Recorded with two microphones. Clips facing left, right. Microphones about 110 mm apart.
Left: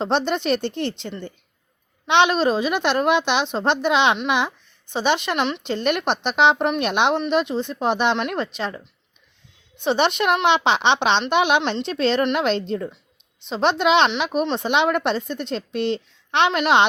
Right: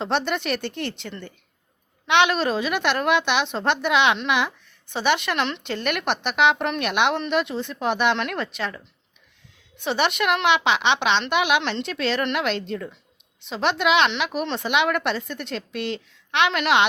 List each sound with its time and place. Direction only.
0.0 s a woman's voice: 25° left (ahead or behind)
9.8 s a woman's voice: 25° left (ahead or behind)
14.1 s a woman's voice: 20° left (ahead or behind)